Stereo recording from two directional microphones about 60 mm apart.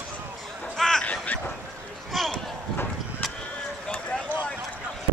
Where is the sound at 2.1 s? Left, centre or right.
Centre.